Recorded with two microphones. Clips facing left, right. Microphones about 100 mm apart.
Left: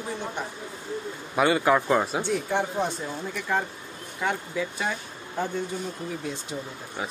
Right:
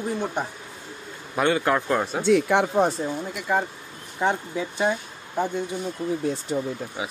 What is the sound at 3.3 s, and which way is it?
Speech, 15° right (ahead or behind).